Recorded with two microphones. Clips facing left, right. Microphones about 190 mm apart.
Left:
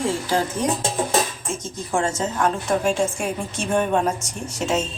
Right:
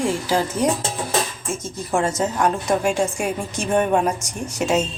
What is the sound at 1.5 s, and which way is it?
A woman's voice, 5° right (ahead or behind).